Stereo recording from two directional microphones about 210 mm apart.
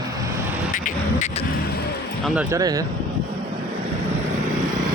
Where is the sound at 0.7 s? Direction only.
35° left (ahead or behind).